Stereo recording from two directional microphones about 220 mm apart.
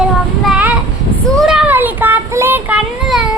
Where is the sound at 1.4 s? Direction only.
Centre (ahead or behind).